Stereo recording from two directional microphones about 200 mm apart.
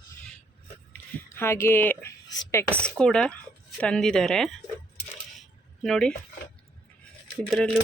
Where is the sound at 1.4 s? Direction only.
15° left (ahead or behind).